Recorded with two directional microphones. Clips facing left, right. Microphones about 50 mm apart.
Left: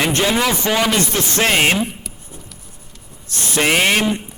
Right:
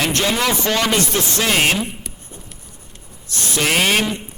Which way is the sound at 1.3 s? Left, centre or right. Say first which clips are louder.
Left 2 dB; left.